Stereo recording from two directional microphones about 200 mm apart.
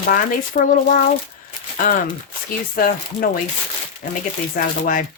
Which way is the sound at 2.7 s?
45° left (ahead or behind).